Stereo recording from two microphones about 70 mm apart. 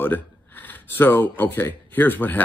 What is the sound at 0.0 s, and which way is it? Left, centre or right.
Speech, left.